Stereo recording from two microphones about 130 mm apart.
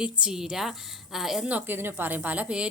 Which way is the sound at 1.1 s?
Centre (ahead or behind).